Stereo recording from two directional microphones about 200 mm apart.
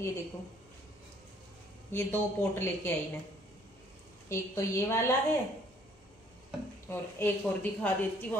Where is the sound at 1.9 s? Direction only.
10° left (ahead or behind).